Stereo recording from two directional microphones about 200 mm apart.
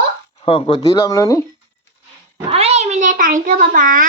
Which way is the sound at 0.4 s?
25° left (ahead or behind).